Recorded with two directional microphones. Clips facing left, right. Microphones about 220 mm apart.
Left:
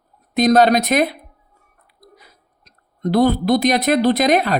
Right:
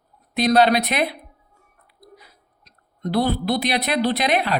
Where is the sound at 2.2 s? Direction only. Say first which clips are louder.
Left 1 dB; 45° left (ahead or behind).